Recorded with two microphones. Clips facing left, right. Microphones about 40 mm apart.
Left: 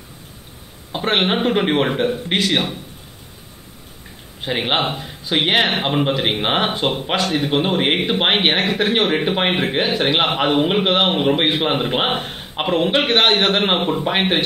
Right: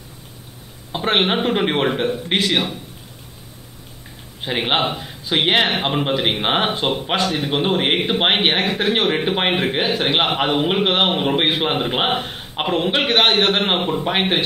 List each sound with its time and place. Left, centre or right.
0.9 s a man's voice: centre
4.4 s a man's voice: centre